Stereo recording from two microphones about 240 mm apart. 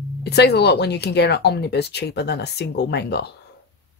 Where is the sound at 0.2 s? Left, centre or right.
Left.